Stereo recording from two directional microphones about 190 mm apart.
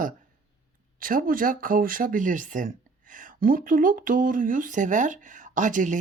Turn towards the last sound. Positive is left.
turn(degrees=-40)  # may be behind; listen again after turning